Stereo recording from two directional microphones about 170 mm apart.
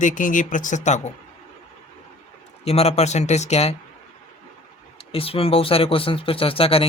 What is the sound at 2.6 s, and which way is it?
Speech, 35° left (ahead or behind).